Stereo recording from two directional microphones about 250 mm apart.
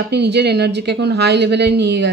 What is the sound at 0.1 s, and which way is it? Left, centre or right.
Speech, right.